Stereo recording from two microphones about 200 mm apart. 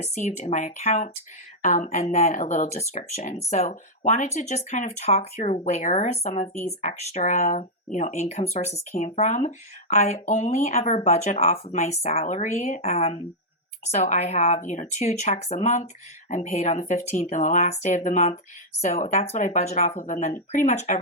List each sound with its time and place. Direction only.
0.0 s speech: 35° left (ahead or behind)